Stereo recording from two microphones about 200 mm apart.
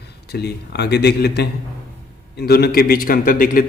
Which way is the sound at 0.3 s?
55° left (ahead or behind).